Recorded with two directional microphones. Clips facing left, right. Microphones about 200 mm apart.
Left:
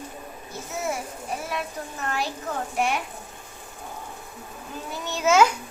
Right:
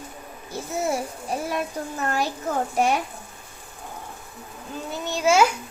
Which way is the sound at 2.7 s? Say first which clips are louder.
Right 3 dB; 40° right (ahead or behind).